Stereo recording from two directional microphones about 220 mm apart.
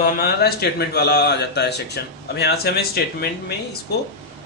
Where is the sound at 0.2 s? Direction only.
45° left (ahead or behind).